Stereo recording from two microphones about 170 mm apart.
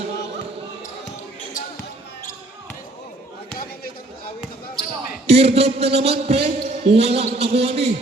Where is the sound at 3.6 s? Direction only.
60° left (ahead or behind).